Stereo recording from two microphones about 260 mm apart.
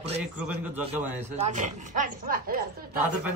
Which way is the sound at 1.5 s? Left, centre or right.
Right.